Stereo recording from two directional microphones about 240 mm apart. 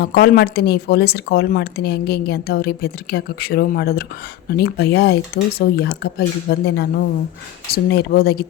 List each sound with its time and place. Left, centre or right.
0.0 s speech: left